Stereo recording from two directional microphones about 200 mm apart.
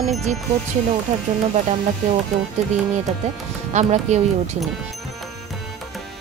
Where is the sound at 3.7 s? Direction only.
35° right (ahead or behind).